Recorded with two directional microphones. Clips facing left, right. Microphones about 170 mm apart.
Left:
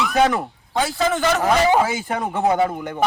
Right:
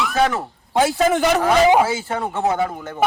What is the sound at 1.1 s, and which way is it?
Speech, 15° right (ahead or behind).